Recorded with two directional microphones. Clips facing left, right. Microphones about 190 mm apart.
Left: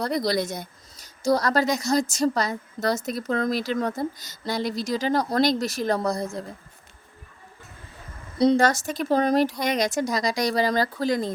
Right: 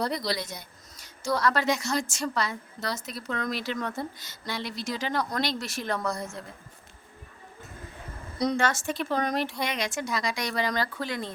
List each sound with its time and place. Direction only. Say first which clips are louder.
0.0 s speech: left 5 dB; 45° left (ahead or behind)
8.4 s speech: left 7 dB; 35° left (ahead or behind)